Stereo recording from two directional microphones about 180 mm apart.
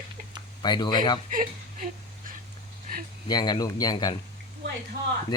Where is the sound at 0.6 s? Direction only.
25° left (ahead or behind).